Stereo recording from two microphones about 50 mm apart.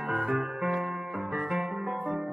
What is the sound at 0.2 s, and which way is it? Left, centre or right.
Music, centre.